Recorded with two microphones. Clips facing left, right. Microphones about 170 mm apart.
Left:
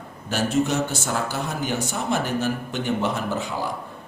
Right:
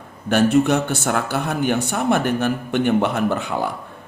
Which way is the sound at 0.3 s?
60° right (ahead or behind).